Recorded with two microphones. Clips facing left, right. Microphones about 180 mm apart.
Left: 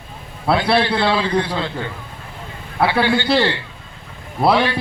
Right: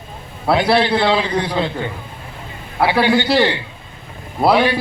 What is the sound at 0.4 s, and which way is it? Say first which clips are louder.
A man's voice: right 2 dB; 20° right (ahead or behind).